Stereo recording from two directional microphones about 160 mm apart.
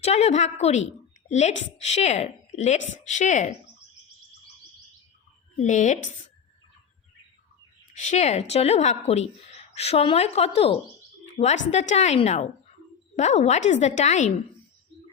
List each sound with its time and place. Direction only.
0.0 s a woman's voice: 40° left (ahead or behind)
5.5 s a woman's voice: 50° left (ahead or behind)
7.9 s a woman's voice: 45° left (ahead or behind)